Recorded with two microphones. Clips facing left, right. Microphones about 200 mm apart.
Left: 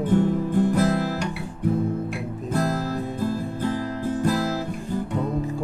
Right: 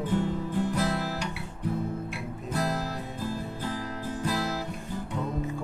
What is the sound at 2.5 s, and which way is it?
Music, 50° left (ahead or behind).